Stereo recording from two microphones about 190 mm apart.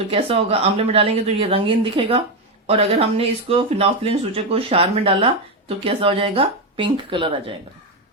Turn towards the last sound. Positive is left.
turn(degrees=-25)  # may be behind; listen again after turning